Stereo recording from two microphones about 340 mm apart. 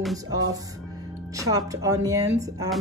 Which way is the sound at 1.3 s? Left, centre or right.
Centre.